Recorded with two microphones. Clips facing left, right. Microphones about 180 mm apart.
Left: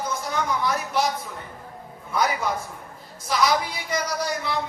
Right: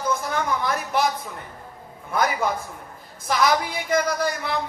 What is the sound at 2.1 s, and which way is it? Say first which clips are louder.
A man's voice: right 1 dB; 55° right (ahead or behind).